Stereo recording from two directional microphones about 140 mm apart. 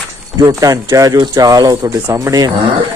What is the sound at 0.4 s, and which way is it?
Speech, 25° right (ahead or behind).